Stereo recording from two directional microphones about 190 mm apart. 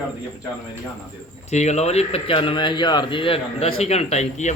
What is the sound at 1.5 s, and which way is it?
A man's voice, 35° left (ahead or behind).